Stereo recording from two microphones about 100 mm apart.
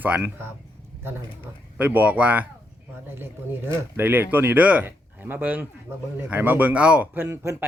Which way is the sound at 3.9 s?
20° right (ahead or behind).